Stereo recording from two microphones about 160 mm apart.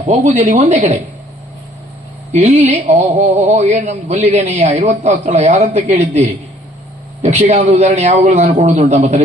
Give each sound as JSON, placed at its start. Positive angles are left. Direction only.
{"t": 0.0, "sound": "speech", "side_deg": -45}
{"t": 2.3, "sound": "speech", "side_deg": -45}